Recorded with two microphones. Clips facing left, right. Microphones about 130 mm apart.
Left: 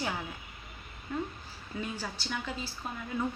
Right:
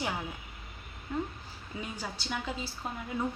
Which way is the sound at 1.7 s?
15° right (ahead or behind).